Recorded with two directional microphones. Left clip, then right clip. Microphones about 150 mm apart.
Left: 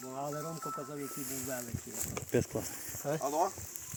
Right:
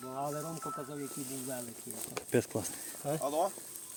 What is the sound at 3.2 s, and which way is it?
Speech, 55° right (ahead or behind).